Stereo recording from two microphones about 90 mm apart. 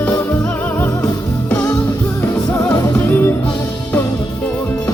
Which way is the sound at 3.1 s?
20° left (ahead or behind).